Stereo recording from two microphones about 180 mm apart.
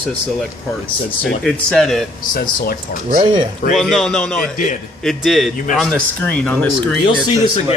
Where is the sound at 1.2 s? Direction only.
5° left (ahead or behind).